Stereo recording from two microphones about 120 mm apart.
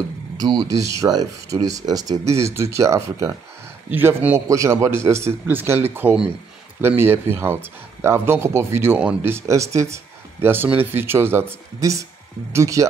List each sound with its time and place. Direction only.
0.4 s speech: 35° right (ahead or behind)
3.9 s speech: 15° right (ahead or behind)